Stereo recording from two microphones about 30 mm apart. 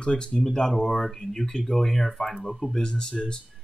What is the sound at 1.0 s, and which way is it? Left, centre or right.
Speech, centre.